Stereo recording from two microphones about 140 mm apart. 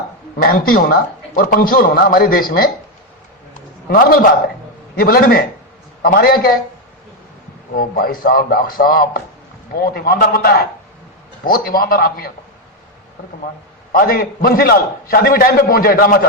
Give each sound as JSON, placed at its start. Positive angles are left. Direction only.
{"t": 0.4, "sound": "a man's voice", "side_deg": 90}
{"t": 3.8, "sound": "a man's voice", "side_deg": 90}
{"t": 7.7, "sound": "a man's voice", "side_deg": 90}
{"t": 13.9, "sound": "a man's voice", "side_deg": 90}